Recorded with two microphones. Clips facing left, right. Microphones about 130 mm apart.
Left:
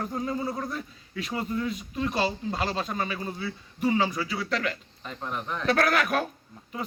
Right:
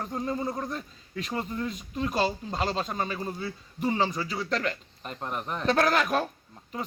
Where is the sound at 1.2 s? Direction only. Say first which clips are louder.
Left 2 dB; 5° left (ahead or behind).